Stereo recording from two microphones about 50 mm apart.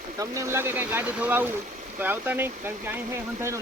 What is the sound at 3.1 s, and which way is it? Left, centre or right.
Speech, right.